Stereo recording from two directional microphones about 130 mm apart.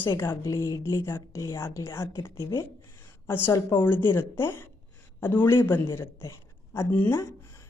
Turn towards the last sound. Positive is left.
turn(degrees=20)  # may be behind; listen again after turning